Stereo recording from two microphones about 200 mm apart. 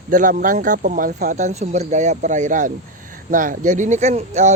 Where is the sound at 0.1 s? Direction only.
40° right (ahead or behind).